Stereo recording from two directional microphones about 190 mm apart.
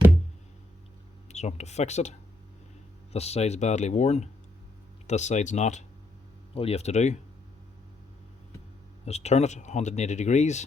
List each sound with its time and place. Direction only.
1.3 s speech: 35° left (ahead or behind)
9.0 s speech: 35° left (ahead or behind)